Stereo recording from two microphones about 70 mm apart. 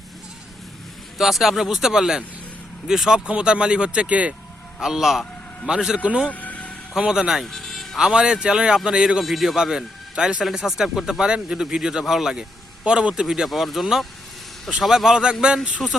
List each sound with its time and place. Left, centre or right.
1.2 s speech: centre
4.8 s speech: centre
6.2 s vehicle: left
6.9 s speech: centre
7.4 s music: centre
7.9 s speech: centre